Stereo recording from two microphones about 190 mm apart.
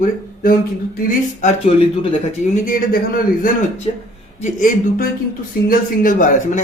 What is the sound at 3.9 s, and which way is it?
Speech, 35° left (ahead or behind).